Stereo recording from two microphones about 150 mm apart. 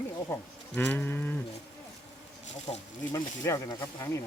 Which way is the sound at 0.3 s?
15° left (ahead or behind).